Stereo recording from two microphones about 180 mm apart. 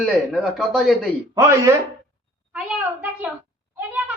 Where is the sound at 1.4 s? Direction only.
15° right (ahead or behind).